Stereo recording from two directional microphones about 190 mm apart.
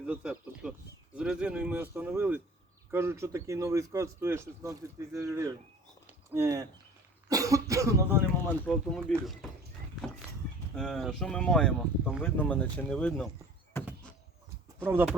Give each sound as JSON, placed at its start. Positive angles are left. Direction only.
{"t": 0.0, "sound": "speech", "side_deg": -5}
{"t": 1.1, "sound": "a sound", "side_deg": -5}
{"t": 2.9, "sound": "speech", "side_deg": -15}
{"t": 8.6, "sound": "speech", "side_deg": 5}
{"t": 10.8, "sound": "speech", "side_deg": 0}
{"t": 14.8, "sound": "speech", "side_deg": -10}